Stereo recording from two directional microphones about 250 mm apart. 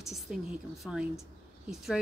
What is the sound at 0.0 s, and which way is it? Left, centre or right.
Speech, centre.